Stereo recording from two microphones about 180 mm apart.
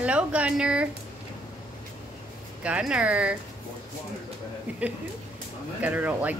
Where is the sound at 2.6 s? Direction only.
5° right (ahead or behind).